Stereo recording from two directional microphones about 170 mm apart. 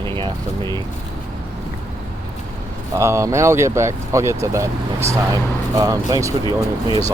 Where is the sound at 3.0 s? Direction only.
15° right (ahead or behind).